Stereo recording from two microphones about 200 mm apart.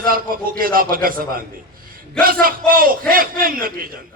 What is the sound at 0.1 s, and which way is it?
A man's voice, 45° right (ahead or behind).